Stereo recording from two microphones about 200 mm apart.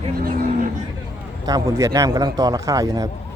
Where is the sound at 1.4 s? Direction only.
15° right (ahead or behind).